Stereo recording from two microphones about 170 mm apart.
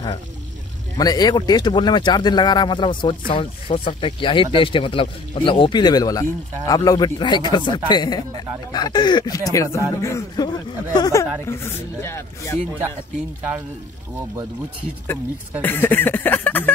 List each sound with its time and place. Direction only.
0.9 s speech: 25° left (ahead or behind)
15.6 s speech: 10° left (ahead or behind)